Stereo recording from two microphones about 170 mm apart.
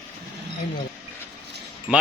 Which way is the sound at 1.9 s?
5° right (ahead or behind).